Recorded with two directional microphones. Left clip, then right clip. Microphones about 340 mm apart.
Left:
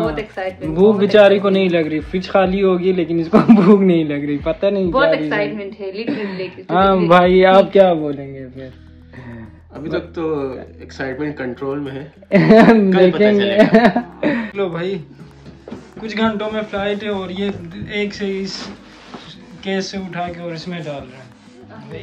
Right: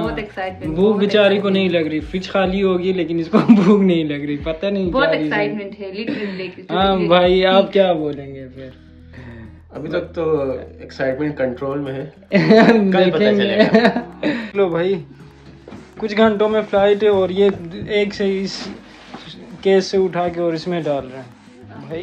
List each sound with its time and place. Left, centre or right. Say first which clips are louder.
0.0 s speech: left 2 dB; centre
0.7 s a man's voice: left 4 dB; centre
6.7 s a man's voice: left 3 dB; centre
9.8 s speech: right 1 dB; centre
12.3 s a man's voice: left 2 dB; centre
12.9 s speech: left 2 dB; centre
13.6 s speech: left 4 dB; centre
14.5 s speech: right 4 dB; centre
19.6 s speech: right 9 dB; centre